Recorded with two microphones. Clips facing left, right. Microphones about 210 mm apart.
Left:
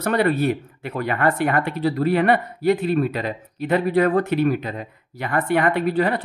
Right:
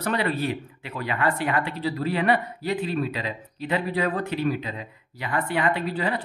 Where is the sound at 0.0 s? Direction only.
50° left (ahead or behind).